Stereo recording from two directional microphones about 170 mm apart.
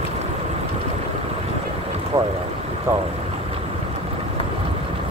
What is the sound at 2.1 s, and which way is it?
Boat, 20° right (ahead or behind).